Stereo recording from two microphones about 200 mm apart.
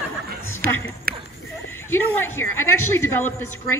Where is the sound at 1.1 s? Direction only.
50° right (ahead or behind).